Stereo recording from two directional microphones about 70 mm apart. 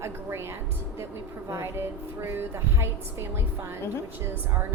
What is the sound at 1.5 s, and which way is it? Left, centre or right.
A woman's voice, right.